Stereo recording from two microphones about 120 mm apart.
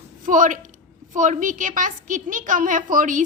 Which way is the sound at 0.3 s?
90° right.